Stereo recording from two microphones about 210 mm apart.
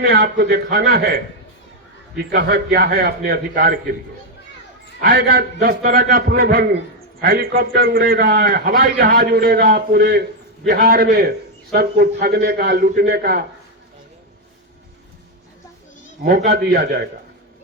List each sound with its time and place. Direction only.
0.0 s a man's voice: 45° right (ahead or behind)
2.3 s a man's voice: 50° right (ahead or behind)
4.9 s a man's voice: 45° right (ahead or behind)
16.2 s a man's voice: 45° right (ahead or behind)